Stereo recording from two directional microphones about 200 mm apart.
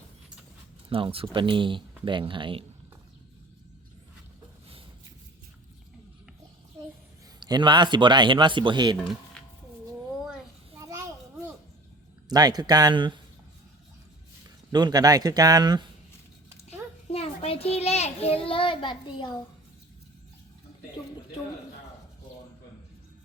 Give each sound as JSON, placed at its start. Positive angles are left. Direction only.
{"t": 0.9, "sound": "speech", "side_deg": -25}
{"t": 7.3, "sound": "speech", "side_deg": -20}
{"t": 9.4, "sound": "a sound", "side_deg": 5}
{"t": 10.8, "sound": "children playing", "side_deg": -15}
{"t": 12.3, "sound": "speech", "side_deg": -20}
{"t": 14.4, "sound": "speech", "side_deg": -20}
{"t": 16.6, "sound": "a sound", "side_deg": 30}